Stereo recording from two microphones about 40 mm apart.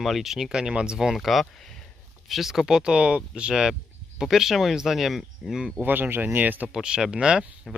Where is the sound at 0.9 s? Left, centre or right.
Centre.